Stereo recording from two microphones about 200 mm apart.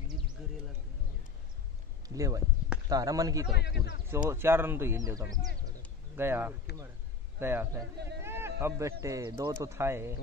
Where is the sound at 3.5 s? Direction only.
55° left (ahead or behind).